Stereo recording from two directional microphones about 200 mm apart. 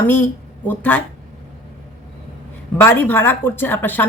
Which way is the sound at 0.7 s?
10° left (ahead or behind).